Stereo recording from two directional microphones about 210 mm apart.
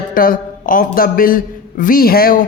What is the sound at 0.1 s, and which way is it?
A man's voice, 40° left (ahead or behind).